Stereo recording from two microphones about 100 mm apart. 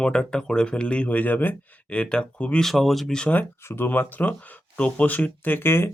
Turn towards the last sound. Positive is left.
turn(degrees=25)  # may be behind; listen again after turning